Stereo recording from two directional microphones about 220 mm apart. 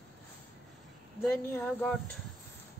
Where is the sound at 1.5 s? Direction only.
5° left (ahead or behind).